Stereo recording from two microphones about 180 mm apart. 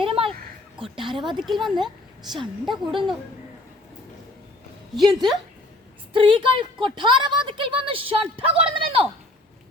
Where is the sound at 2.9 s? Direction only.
25° right (ahead or behind).